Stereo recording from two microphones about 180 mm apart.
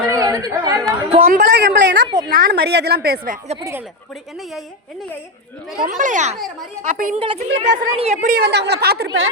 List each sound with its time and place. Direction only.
0.1 s chatter: 20° right (ahead or behind)
1.2 s speech: 50° right (ahead or behind)
1.5 s a sound: 75° right (ahead or behind)
2.0 s a sound: 25° right (ahead or behind)
2.3 s a woman's voice: 55° right (ahead or behind)
3.6 s a woman's voice: 15° right (ahead or behind)
5.8 s speech: 45° right (ahead or behind)
6.3 s speech: centre (ahead or behind)
6.8 s speech: 45° right (ahead or behind)
8.4 s a woman's voice: 70° right (ahead or behind)